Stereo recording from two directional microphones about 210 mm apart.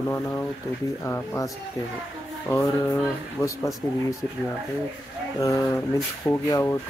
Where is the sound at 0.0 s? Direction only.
10° left (ahead or behind).